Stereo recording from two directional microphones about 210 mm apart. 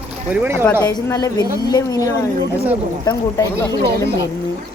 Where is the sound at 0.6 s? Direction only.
15° left (ahead or behind).